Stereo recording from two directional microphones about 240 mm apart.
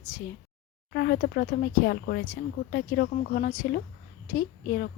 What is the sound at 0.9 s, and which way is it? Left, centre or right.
Speech, left.